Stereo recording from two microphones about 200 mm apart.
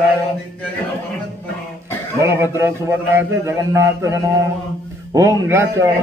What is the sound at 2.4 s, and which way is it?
A man's voice, 10° right (ahead or behind).